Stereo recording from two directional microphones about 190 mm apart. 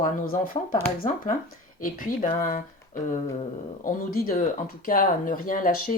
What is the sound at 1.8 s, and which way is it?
Speech, 45° left (ahead or behind).